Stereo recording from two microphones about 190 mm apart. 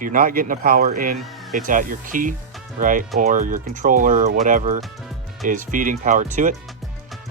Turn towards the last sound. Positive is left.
turn(degrees=-40)  # may be behind; listen again after turning